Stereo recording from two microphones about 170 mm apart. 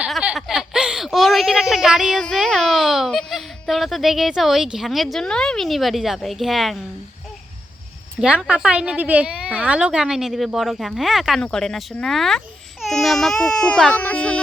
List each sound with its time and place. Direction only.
0.0 s speech: 5° right (ahead or behind)
8.2 s speech: 5° right (ahead or behind)